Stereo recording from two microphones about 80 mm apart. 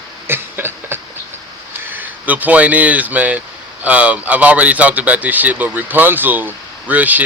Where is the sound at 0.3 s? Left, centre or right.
Right.